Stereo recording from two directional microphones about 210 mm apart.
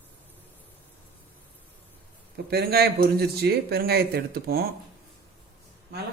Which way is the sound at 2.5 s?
50° right (ahead or behind).